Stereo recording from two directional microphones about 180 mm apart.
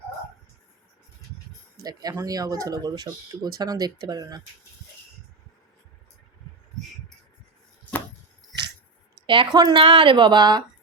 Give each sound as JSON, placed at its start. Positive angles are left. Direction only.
{"t": 1.8, "sound": "speech", "side_deg": -20}
{"t": 9.2, "sound": "speech", "side_deg": -25}